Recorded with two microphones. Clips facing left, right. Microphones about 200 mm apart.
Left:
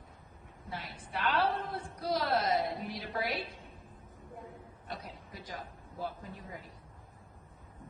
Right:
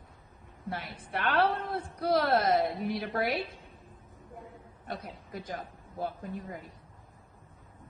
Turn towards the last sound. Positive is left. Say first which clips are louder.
# right 6 dB
turn(degrees=-50)  # may be behind; listen again after turning